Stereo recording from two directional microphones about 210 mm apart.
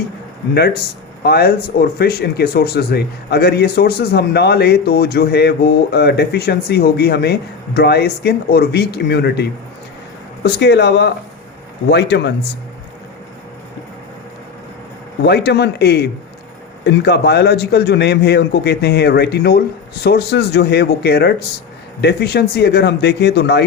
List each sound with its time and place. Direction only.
0.5 s speech: 50° left (ahead or behind)
15.2 s speech: 50° left (ahead or behind)